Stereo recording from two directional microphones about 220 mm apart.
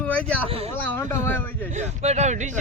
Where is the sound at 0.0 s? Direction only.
5° left (ahead or behind).